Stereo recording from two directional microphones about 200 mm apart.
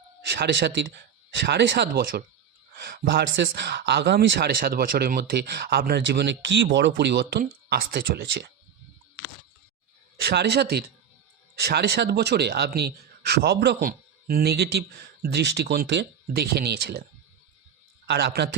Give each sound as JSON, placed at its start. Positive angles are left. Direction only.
{"t": 0.3, "sound": "speech", "side_deg": -60}
{"t": 10.2, "sound": "a man's voice", "side_deg": -55}